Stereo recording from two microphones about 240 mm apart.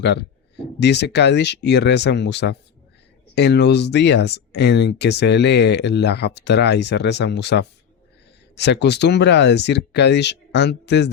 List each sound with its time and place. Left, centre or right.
0.0 s speech: left